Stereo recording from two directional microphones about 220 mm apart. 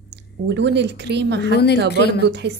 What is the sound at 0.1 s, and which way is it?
A woman's voice, 50° right (ahead or behind).